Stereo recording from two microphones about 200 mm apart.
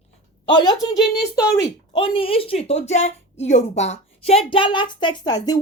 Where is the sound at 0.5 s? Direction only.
20° left (ahead or behind).